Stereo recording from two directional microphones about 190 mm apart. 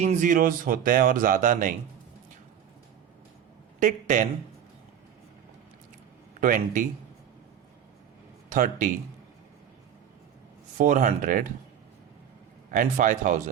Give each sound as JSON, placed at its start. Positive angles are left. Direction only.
{"t": 0.0, "sound": "speech", "side_deg": -40}
{"t": 3.8, "sound": "speech", "side_deg": -45}
{"t": 6.4, "sound": "speech", "side_deg": -45}
{"t": 8.5, "sound": "speech", "side_deg": -45}
{"t": 10.8, "sound": "speech", "side_deg": -45}
{"t": 12.7, "sound": "speech", "side_deg": -45}